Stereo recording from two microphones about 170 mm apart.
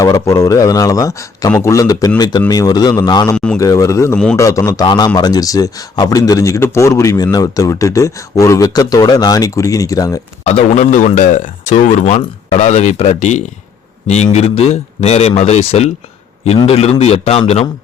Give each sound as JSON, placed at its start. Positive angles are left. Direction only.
{"t": 0.0, "sound": "speech", "side_deg": 20}
{"t": 3.3, "sound": "a man's voice", "side_deg": 5}
{"t": 3.6, "sound": "speech", "side_deg": 20}
{"t": 10.4, "sound": "speech", "side_deg": 40}